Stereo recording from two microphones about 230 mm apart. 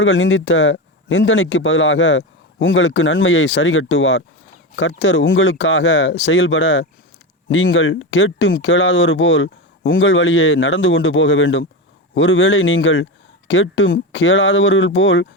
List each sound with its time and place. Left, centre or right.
0.0 s a man's voice: left